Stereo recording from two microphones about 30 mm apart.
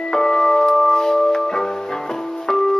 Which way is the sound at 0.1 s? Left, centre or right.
Centre.